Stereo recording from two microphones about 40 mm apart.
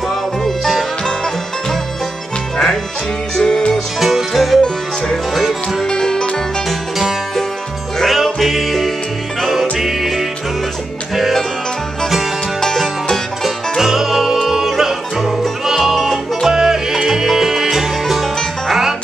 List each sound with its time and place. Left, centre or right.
0.1 s music: centre
3.3 s music: centre
4.0 s music: centre
4.6 s music: centre
5.3 s music: centre
5.9 s music: centre
7.0 s music: centre
12.5 s music: centre
13.4 s music: centre
16.0 s music: centre
16.4 s music: centre